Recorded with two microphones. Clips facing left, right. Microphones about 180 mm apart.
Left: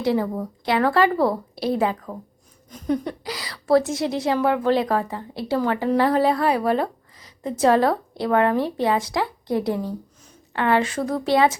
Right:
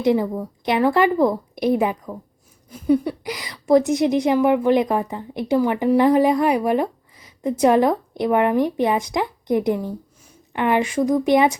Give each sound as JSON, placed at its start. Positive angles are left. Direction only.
{"t": 0.0, "sound": "a woman's voice", "side_deg": -20}